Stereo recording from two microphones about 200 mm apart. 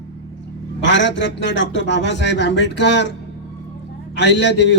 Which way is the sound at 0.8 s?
65° left (ahead or behind).